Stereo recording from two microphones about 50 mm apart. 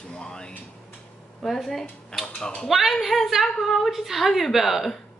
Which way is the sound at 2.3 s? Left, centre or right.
Centre.